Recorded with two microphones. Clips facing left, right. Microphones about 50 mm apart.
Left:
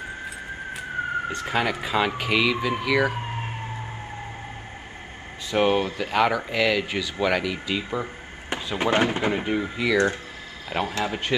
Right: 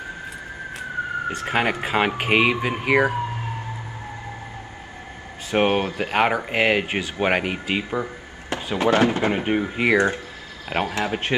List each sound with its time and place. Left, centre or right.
1.4 s speech: right
5.5 s speech: right
8.7 s speech: left
9.2 s speech: right
9.9 s speech: right
10.7 s speech: right